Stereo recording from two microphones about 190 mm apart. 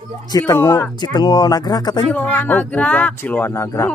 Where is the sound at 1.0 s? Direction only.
20° left (ahead or behind).